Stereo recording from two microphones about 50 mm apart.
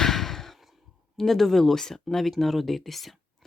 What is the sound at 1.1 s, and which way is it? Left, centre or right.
Speech, centre.